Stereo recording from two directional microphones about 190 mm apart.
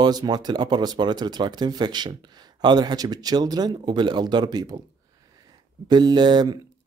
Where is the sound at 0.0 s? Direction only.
20° right (ahead or behind).